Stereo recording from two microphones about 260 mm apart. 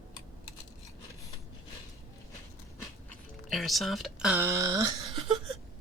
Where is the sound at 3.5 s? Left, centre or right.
Centre.